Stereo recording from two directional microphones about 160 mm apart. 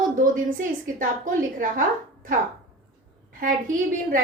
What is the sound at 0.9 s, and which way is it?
Speech, 55° right (ahead or behind).